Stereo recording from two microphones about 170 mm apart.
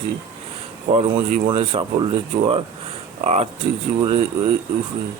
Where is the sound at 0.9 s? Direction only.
35° right (ahead or behind).